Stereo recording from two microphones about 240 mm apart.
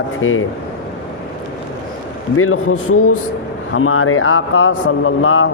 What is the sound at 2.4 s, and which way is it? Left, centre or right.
A man's voice, left.